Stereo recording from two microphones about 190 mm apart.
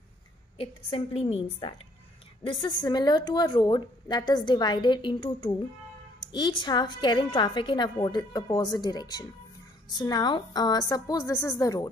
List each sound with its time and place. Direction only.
0.6 s a woman's voice: 30° left (ahead or behind)